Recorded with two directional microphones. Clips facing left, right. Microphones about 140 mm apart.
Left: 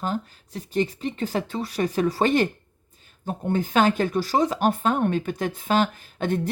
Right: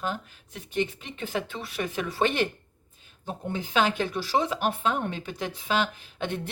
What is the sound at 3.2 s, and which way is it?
Speech, 50° left (ahead or behind).